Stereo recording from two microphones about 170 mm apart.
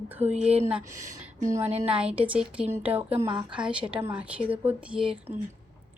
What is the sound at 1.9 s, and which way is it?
Speech, 5° right (ahead or behind).